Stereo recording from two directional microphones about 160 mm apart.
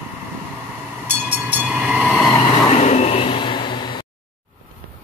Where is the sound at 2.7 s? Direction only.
45° left (ahead or behind).